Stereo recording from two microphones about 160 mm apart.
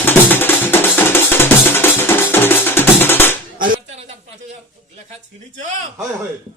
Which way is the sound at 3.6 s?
60° right (ahead or behind).